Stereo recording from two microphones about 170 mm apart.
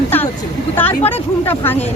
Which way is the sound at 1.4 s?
10° left (ahead or behind).